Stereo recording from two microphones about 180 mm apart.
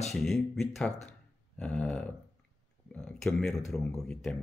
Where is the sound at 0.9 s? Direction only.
40° left (ahead or behind).